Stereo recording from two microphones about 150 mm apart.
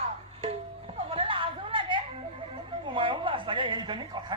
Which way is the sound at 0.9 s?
35° right (ahead or behind).